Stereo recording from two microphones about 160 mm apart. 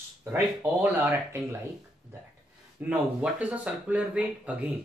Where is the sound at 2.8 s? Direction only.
10° right (ahead or behind).